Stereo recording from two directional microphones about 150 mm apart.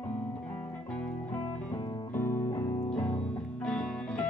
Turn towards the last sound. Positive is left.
turn(degrees=5)  # may be behind; listen again after turning